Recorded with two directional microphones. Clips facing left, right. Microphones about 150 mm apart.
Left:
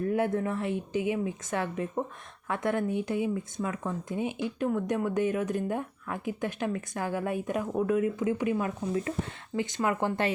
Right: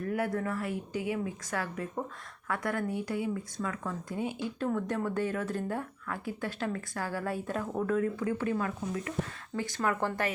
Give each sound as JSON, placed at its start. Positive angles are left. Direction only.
{"t": 0.0, "sound": "speech", "side_deg": 25}
{"t": 8.9, "sound": "speech", "side_deg": 30}